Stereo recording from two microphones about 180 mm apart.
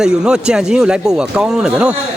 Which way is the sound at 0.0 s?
5° right (ahead or behind).